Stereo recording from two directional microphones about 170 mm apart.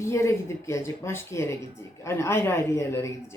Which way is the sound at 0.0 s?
15° left (ahead or behind).